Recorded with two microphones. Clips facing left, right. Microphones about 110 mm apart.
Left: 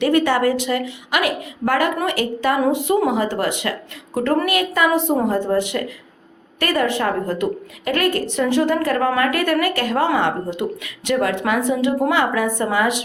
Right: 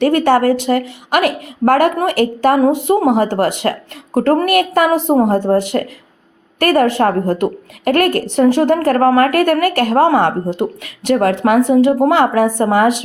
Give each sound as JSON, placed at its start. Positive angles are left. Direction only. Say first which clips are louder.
{"t": 0.0, "sound": "a woman's voice", "louder": "right 5 dB", "side_deg": -50}